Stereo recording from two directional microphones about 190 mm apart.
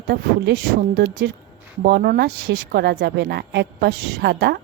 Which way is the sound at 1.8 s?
55° right (ahead or behind).